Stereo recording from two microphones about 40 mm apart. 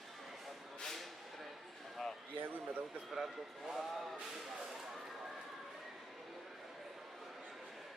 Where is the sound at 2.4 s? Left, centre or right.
Right.